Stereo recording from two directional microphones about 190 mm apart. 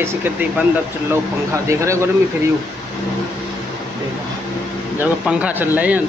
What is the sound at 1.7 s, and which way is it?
Speech, 15° right (ahead or behind).